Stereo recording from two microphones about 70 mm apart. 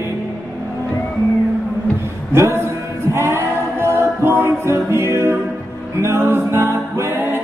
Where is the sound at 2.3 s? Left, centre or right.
Right.